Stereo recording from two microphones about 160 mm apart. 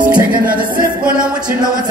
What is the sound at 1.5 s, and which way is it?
Music, 60° right (ahead or behind).